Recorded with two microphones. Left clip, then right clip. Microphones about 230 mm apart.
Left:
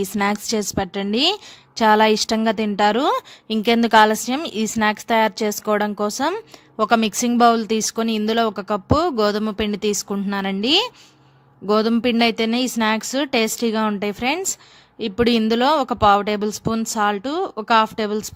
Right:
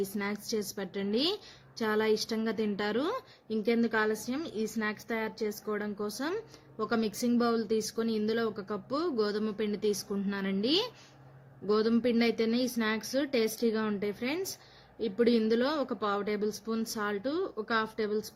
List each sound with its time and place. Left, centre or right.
0.2 s a woman's voice: left